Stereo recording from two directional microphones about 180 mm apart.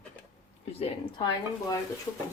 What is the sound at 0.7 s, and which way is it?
Speech, 35° left (ahead or behind).